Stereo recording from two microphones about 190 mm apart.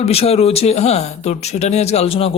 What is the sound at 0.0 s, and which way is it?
Speech, 30° left (ahead or behind).